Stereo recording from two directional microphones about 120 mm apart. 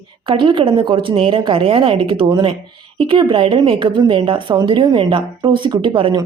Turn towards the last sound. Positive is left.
turn(degrees=-45)  # may be behind; listen again after turning